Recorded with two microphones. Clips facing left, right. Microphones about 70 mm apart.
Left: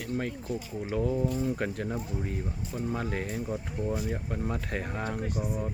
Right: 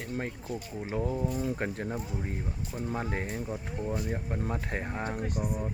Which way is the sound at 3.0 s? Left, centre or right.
Right.